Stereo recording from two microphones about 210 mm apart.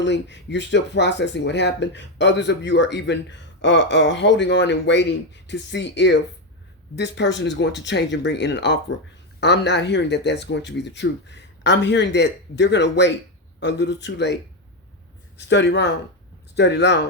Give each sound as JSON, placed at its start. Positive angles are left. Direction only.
{"t": 0.0, "sound": "speech", "side_deg": 55}
{"t": 15.4, "sound": "speech", "side_deg": 55}